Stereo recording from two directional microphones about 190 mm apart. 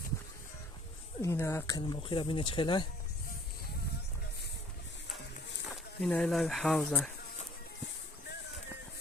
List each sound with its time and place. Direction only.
1.2 s speech: 15° left (ahead or behind)
5.7 s speech: 5° left (ahead or behind)